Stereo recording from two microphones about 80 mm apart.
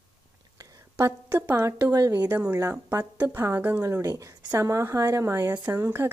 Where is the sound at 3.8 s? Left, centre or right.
Right.